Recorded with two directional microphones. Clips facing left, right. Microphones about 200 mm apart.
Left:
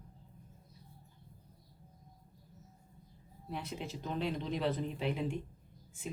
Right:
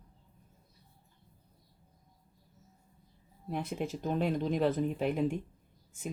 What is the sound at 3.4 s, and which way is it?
Speech, 50° right (ahead or behind).